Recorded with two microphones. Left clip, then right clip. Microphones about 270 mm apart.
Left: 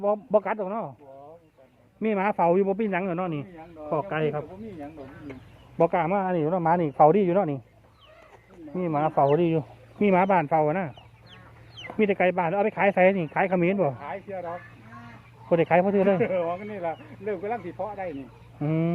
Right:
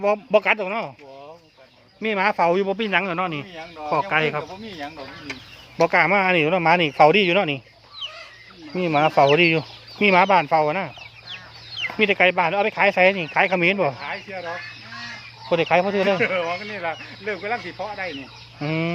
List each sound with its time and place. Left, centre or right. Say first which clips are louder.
0.0 s speech: right 5 dB; centre
2.0 s speech: right 4 dB; centre
5.8 s speech: right 6 dB; centre
8.7 s speech: right 6 dB; right
9.4 s speech: right 7 dB; centre
11.9 s speech: right 5 dB; centre
14.0 s speech: right 4 dB; left
15.4 s speech: right 2 dB; centre
16.2 s speech: right 4 dB; left
18.6 s speech: right 3 dB; centre